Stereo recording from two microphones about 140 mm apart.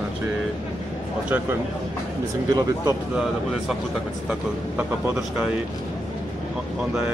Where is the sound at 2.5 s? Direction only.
25° right (ahead or behind).